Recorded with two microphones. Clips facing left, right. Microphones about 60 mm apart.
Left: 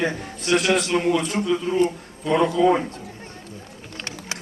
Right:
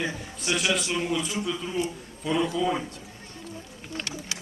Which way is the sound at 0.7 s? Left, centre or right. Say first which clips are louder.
Left 7 dB; left.